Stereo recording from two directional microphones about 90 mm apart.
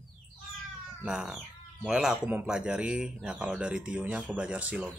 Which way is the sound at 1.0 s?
5° right (ahead or behind).